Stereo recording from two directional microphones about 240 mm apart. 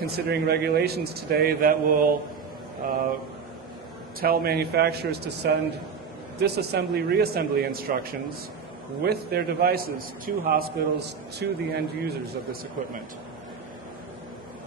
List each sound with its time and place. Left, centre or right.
0.1 s a man's voice: right
4.2 s a man's voice: right